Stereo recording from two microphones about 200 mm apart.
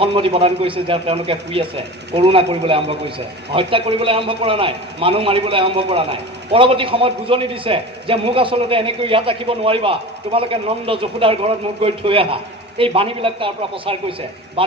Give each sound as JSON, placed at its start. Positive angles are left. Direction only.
{"t": 0.0, "sound": "a man's voice", "side_deg": -25}